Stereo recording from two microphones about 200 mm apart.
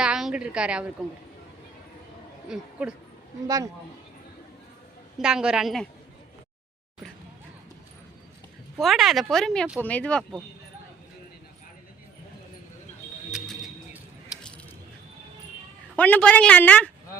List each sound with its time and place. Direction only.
0.0 s a woman's voice: 5° right (ahead or behind)
2.5 s a woman's voice: 5° right (ahead or behind)
3.4 s speech: 15° right (ahead or behind)
5.2 s a woman's voice: 5° right (ahead or behind)
8.8 s a woman's voice: centre (ahead or behind)
13.3 s music: centre (ahead or behind)
16.0 s a woman's voice: 5° left (ahead or behind)